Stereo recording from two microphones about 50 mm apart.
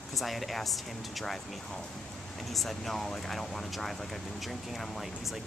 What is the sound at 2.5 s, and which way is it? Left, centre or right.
Speech, centre.